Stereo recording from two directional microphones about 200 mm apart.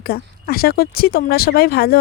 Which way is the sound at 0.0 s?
50° left (ahead or behind).